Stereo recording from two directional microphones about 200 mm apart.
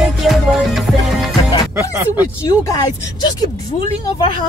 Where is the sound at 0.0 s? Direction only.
Centre (ahead or behind).